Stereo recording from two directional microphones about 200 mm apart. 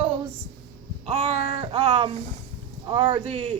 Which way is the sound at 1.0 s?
35° right (ahead or behind).